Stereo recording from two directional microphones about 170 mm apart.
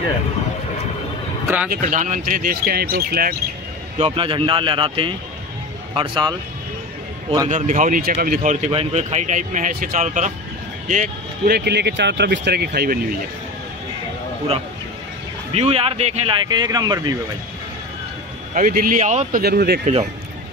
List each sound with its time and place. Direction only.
1.7 s speech: 50° right (ahead or behind)
4.0 s speech: 30° right (ahead or behind)
7.4 s speech: 50° right (ahead or behind)
11.5 s speech: 75° right (ahead or behind)
15.5 s speech: 35° right (ahead or behind)
18.5 s speech: 55° right (ahead or behind)
19.4 s speech: 65° right (ahead or behind)